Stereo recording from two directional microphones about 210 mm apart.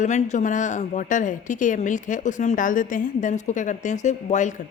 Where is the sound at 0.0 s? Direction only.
35° left (ahead or behind).